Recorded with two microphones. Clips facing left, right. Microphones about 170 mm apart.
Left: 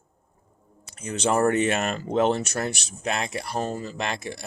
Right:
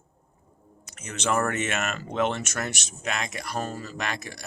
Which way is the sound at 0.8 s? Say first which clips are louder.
Left 5 dB; 30° left (ahead or behind).